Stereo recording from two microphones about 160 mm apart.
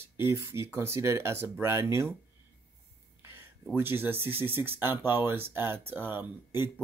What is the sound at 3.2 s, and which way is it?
Speech, 15° right (ahead or behind).